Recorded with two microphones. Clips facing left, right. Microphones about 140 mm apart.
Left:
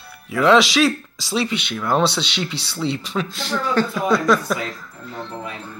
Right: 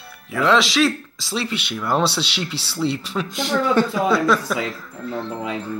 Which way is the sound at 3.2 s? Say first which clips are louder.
Right 4 dB; 15° right (ahead or behind).